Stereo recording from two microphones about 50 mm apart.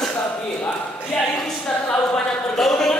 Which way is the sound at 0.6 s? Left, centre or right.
Left.